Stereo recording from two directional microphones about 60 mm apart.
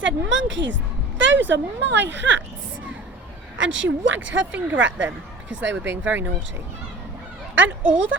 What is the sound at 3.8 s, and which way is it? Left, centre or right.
Speech, right.